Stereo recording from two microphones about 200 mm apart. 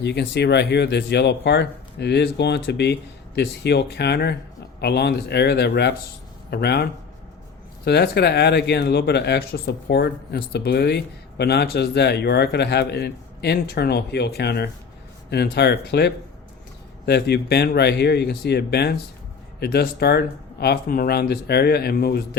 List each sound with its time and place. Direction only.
0.0 s speech: 60° left (ahead or behind)
7.9 s speech: 55° left (ahead or behind)